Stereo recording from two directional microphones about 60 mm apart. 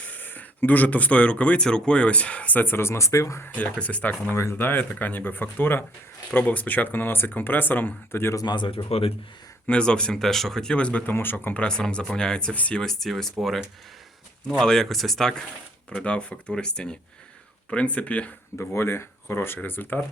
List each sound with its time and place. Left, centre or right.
0.0 s speech: left
3.5 s speech: left
4.4 s speech: left
9.6 s speech: centre
11.0 s speech: left
11.5 s speech: centre
12.5 s speech: left
12.8 s speech: centre
14.6 s speech: centre
15.9 s speech: centre
18.7 s speech: left